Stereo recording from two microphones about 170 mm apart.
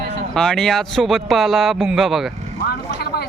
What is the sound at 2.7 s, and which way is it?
Vehicle, 70° left (ahead or behind).